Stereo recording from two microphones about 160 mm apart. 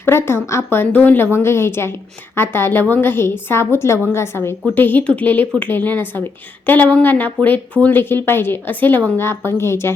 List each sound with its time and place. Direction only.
0.0 s speech: 15° left (ahead or behind)